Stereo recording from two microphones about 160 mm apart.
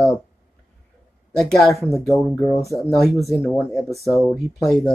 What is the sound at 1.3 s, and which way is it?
Speech, centre (ahead or behind).